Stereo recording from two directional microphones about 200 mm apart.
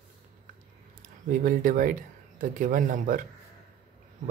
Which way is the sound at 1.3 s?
45° right (ahead or behind).